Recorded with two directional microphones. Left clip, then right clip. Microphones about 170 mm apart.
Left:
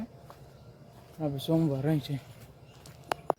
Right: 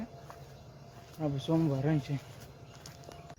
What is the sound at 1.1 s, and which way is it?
Speech, 20° left (ahead or behind).